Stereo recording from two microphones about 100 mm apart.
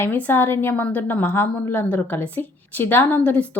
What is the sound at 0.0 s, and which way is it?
A woman's voice, 20° left (ahead or behind).